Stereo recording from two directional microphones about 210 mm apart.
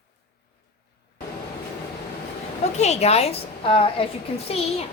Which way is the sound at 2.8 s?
30° left (ahead or behind).